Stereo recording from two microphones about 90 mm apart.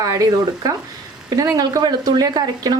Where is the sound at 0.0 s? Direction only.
40° right (ahead or behind).